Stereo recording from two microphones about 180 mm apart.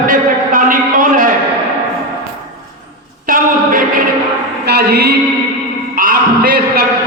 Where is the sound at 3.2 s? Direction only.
50° right (ahead or behind).